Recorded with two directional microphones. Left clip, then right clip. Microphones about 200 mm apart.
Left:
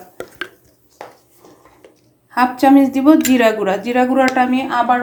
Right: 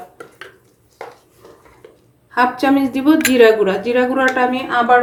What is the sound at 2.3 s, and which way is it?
Speech, 40° left (ahead or behind).